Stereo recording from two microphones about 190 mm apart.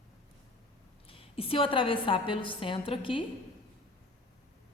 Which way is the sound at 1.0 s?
30° left (ahead or behind).